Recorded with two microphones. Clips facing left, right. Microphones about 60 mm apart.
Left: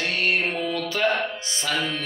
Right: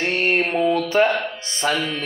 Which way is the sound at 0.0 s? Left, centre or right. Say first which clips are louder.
Right 4 dB; right.